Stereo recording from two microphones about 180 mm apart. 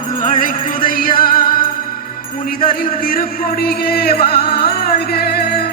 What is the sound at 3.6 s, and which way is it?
Music, 55° left (ahead or behind).